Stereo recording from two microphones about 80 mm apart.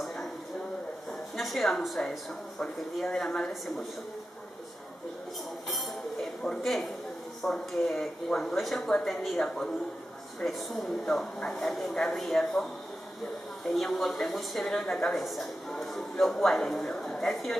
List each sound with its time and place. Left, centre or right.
1.3 s a woman's voice: centre
6.2 s a man's voice: centre
7.4 s speech: centre
7.8 s speech: centre
10.4 s speech: centre
13.7 s speech: centre